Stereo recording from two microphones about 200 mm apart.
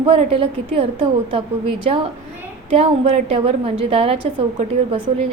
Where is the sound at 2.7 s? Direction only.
30° right (ahead or behind).